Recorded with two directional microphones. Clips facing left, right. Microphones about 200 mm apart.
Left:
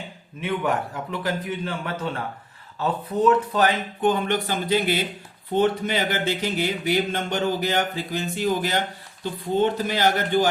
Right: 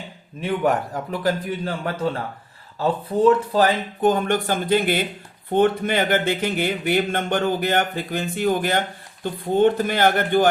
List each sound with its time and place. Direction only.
1.2 s a man's voice: 35° right (ahead or behind); by 10.4 s 55° right (ahead or behind)